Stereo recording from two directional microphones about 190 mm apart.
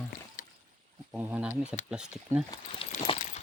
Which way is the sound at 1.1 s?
5° right (ahead or behind).